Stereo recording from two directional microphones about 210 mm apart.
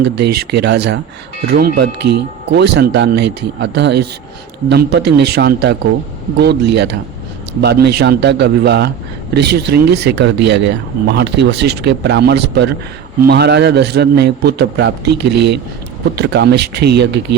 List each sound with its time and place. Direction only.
0.0 s speech: 50° right (ahead or behind)